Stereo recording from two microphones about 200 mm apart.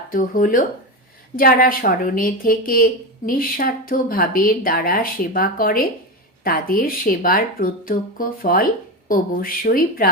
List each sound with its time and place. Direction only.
0.1 s speech: 45° left (ahead or behind)